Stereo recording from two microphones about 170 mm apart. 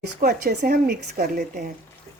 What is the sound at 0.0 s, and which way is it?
A woman's voice, 65° right (ahead or behind).